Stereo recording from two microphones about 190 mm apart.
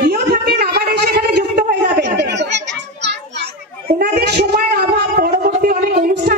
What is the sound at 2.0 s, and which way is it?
Children playing, 65° right (ahead or behind).